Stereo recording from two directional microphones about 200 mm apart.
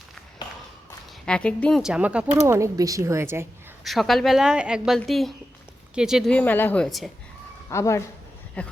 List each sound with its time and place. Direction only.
0.4 s a sound: 20° left (ahead or behind)
0.9 s speech: 5° left (ahead or behind); by 3.4 s 15° right (ahead or behind)
3.8 s a woman's voice: centre (ahead or behind)
7.7 s speech: 15° left (ahead or behind)